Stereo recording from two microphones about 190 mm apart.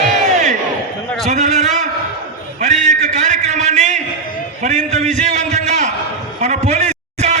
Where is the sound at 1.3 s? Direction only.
40° right (ahead or behind).